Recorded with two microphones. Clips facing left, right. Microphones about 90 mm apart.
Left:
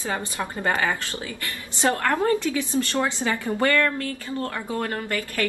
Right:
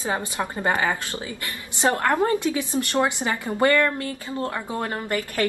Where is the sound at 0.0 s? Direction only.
20° right (ahead or behind).